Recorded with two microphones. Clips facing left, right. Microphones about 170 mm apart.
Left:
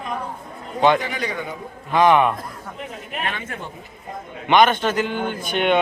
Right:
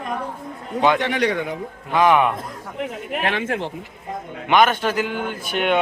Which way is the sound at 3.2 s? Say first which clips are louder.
Right 6 dB; 90° right.